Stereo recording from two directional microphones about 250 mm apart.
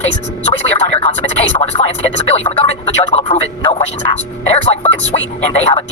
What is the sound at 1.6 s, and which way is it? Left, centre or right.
Speech, left.